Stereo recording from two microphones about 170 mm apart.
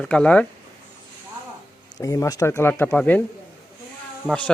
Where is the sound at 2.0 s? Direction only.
20° left (ahead or behind).